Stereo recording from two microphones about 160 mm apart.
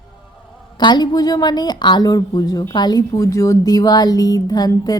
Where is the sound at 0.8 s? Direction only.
25° left (ahead or behind).